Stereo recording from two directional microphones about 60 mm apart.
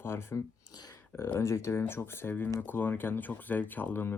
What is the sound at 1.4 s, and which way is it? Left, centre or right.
Speech, left.